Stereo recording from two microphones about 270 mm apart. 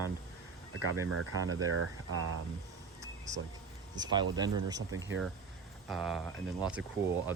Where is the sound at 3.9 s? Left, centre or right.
Centre.